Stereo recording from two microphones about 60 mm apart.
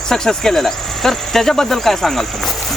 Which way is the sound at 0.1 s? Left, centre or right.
Centre.